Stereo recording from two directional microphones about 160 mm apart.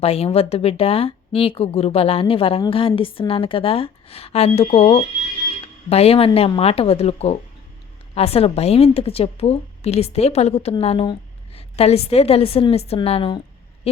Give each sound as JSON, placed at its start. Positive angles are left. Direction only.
{"t": 0.0, "sound": "a woman's voice", "side_deg": 40}